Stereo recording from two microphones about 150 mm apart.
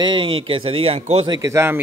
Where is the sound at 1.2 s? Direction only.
25° right (ahead or behind).